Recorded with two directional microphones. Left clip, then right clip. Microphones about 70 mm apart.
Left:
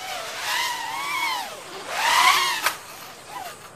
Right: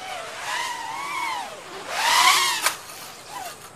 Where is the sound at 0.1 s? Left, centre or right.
Left.